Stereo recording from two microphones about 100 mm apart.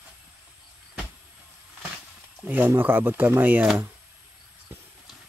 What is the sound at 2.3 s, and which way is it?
Speech, 20° right (ahead or behind).